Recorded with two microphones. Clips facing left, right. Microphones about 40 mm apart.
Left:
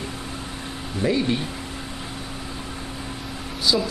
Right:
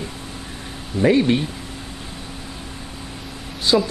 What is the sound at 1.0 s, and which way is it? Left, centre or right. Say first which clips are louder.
Speech: right 6 dB; right.